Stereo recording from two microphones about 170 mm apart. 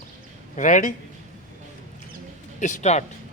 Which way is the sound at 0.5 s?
50° left (ahead or behind).